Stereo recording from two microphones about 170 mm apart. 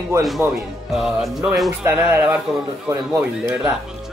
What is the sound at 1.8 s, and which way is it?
Speech, 10° right (ahead or behind).